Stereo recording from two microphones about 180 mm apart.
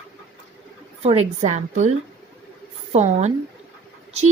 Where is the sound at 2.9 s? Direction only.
40° right (ahead or behind).